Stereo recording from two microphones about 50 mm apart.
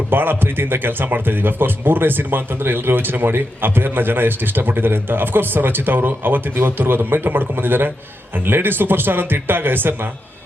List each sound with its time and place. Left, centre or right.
0.1 s speech: right